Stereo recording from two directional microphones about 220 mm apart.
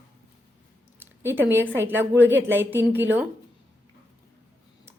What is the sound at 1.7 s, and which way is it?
A woman's voice, 10° right (ahead or behind).